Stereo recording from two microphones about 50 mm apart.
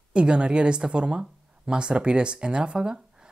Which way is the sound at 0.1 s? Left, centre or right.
Right.